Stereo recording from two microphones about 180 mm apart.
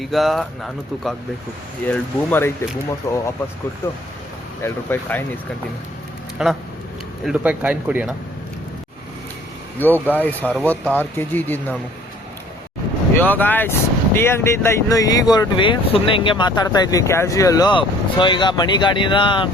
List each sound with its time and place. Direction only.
0.0 s speech: centre (ahead or behind); by 3.2 s 20° left (ahead or behind)
4.6 s speech: 10° left (ahead or behind)
6.4 s speech: 5° right (ahead or behind)
9.7 s speech: 10° left (ahead or behind)
13.1 s speech: 10° left (ahead or behind); by 19.5 s 25° left (ahead or behind)